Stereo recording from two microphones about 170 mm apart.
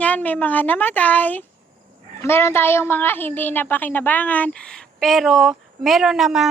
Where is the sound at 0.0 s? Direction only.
10° left (ahead or behind).